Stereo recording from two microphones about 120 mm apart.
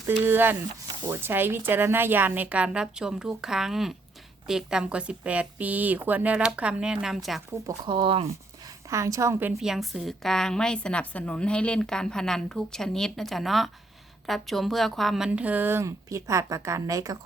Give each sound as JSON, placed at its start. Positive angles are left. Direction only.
{"t": 0.1, "sound": "speech", "side_deg": -15}
{"t": 7.9, "sound": "speech", "side_deg": -45}
{"t": 8.9, "sound": "a woman's voice", "side_deg": -25}
{"t": 9.6, "sound": "a woman's voice", "side_deg": 0}
{"t": 15.3, "sound": "a woman's voice", "side_deg": -10}